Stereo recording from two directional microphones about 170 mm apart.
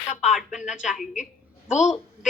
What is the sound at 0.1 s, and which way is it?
Speech, 40° left (ahead or behind).